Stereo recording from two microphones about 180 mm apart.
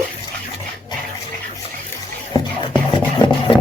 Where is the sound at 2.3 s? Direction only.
25° left (ahead or behind).